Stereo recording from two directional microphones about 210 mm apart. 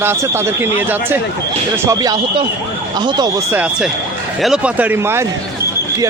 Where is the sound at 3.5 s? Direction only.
5° right (ahead or behind).